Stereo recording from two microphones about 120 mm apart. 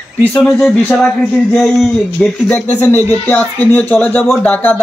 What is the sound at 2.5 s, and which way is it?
Speech, 20° left (ahead or behind).